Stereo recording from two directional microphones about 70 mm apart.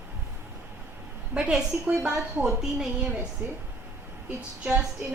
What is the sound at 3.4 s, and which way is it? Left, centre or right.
Speech, right.